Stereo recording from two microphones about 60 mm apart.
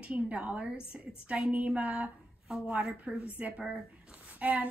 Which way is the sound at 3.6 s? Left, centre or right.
Centre.